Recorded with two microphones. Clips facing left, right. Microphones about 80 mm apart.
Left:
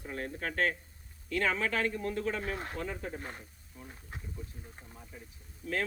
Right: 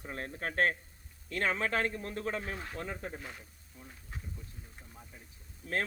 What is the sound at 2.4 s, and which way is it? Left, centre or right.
Speech, left.